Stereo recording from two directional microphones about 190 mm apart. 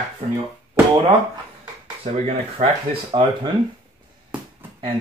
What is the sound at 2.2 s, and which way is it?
Speech, 30° right (ahead or behind).